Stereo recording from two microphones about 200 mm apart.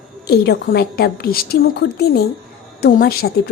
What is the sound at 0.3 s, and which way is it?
A woman's voice, 50° left (ahead or behind).